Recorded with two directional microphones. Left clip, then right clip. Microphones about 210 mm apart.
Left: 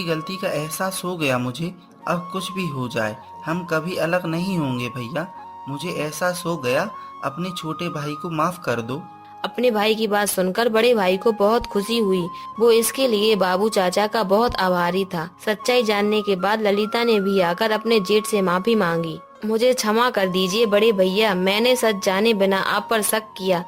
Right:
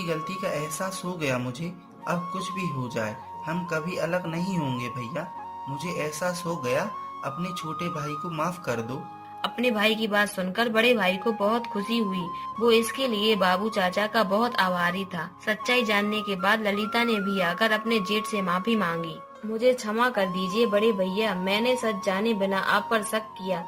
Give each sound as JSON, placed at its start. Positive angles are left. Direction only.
{"t": 0.4, "sound": "speech", "side_deg": 30}
{"t": 9.4, "sound": "speech", "side_deg": 55}